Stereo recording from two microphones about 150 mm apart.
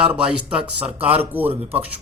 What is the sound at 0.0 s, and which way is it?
A man's voice, 5° right (ahead or behind).